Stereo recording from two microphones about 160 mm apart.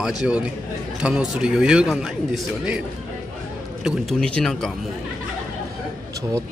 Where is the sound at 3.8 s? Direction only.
Centre (ahead or behind).